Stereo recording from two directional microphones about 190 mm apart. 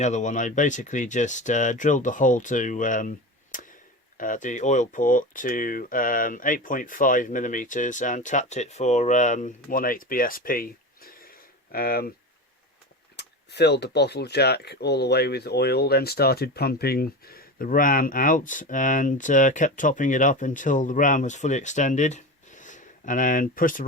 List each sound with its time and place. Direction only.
0.0 s speech: 40° left (ahead or behind)
3.5 s a sound: 45° left (ahead or behind)
4.2 s speech: 45° left (ahead or behind)
13.1 s speech: 60° left (ahead or behind); by 23.8 s 45° left (ahead or behind)